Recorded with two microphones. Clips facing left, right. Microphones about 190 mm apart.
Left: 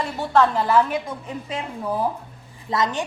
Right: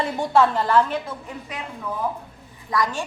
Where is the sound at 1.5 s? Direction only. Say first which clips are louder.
Left 5 dB; 25° left (ahead or behind).